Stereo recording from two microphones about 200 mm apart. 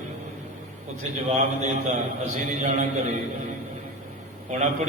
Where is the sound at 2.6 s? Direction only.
40° right (ahead or behind).